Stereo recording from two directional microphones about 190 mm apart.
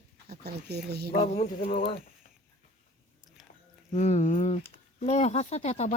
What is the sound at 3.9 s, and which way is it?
Speech, 35° left (ahead or behind).